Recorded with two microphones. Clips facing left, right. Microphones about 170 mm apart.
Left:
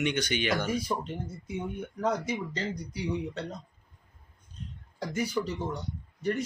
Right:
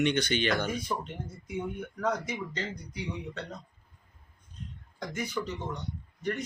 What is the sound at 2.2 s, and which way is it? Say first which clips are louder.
Speech: left 3 dB; 35° left (ahead or behind).